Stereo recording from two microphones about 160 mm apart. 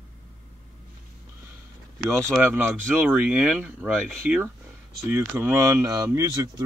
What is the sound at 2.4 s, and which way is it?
Speech, 10° right (ahead or behind).